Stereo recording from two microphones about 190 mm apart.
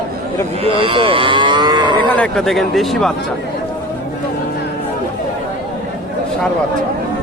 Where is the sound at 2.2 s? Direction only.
Centre (ahead or behind).